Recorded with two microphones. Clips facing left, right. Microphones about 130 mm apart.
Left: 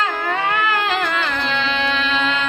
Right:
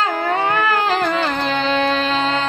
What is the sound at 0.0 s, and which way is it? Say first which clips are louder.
Music: right 3 dB; 35° right (ahead or behind).